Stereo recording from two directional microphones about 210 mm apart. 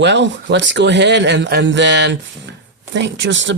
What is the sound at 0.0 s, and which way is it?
Speech, 60° right (ahead or behind).